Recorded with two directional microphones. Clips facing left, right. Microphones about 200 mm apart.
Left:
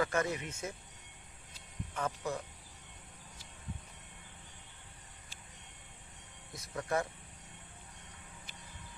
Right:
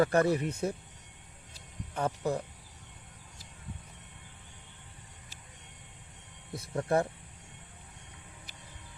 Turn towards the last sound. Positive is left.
turn(degrees=-30)  # may be behind; listen again after turning